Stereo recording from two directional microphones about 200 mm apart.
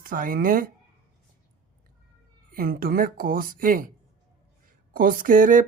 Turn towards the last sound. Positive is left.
turn(degrees=-40)  # may be behind; listen again after turning